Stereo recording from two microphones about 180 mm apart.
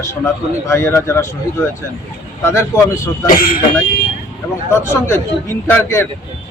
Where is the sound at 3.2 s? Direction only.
50° left (ahead or behind).